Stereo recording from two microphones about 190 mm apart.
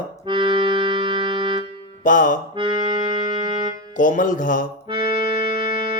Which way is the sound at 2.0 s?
45° left (ahead or behind).